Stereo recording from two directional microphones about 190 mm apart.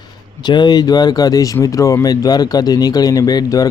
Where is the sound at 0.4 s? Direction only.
20° left (ahead or behind).